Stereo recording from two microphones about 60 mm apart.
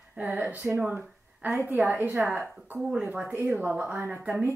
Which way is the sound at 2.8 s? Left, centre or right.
Centre.